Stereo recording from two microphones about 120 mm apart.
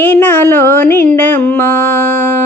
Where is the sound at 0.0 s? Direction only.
15° left (ahead or behind).